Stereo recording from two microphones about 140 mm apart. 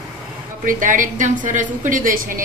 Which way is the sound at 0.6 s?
75° right (ahead or behind).